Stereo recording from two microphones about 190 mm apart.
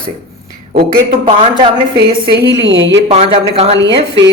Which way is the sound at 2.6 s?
70° right (ahead or behind).